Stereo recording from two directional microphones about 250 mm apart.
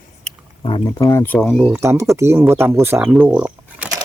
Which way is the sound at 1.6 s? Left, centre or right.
Centre.